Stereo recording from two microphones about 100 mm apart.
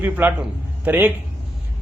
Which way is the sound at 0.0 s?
20° right (ahead or behind).